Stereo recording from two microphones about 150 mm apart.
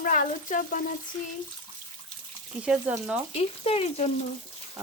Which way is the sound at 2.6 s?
10° right (ahead or behind).